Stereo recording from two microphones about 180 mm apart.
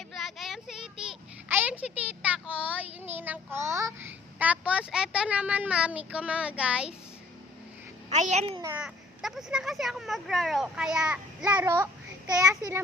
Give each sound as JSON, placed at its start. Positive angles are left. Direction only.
{"t": 0.1, "sound": "a child's voice", "side_deg": 0}
{"t": 8.1, "sound": "a child's voice", "side_deg": -40}
{"t": 8.6, "sound": "a child's voice", "side_deg": -5}